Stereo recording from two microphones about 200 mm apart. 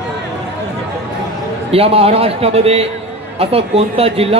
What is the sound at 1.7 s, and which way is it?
A man's voice, 30° right (ahead or behind).